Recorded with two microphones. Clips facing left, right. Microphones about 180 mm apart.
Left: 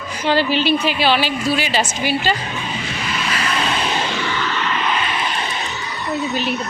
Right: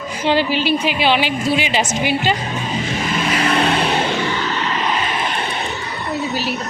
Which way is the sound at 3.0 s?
50° right (ahead or behind).